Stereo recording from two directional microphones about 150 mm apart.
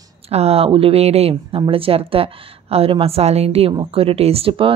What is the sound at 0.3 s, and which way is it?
Speech, 45° right (ahead or behind).